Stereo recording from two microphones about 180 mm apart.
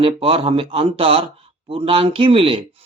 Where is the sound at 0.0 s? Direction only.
30° right (ahead or behind).